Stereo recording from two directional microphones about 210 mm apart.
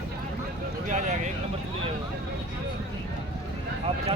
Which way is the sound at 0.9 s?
35° right (ahead or behind).